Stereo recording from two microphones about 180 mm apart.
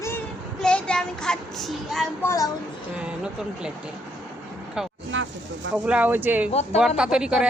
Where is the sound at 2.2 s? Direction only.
20° left (ahead or behind).